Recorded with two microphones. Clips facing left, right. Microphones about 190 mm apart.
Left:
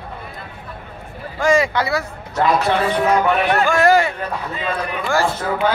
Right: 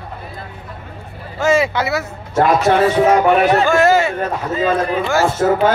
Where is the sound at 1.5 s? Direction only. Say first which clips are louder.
Right 1 dB; 25° right (ahead or behind).